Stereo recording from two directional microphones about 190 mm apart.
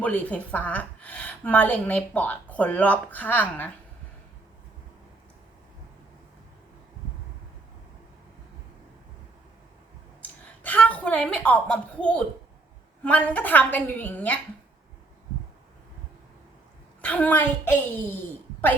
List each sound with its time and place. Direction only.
0.0 s a woman's voice: 5° left (ahead or behind)
10.2 s a sound: 10° left (ahead or behind)
13.0 s a woman's voice: 10° left (ahead or behind)
17.0 s a woman's voice: 5° left (ahead or behind)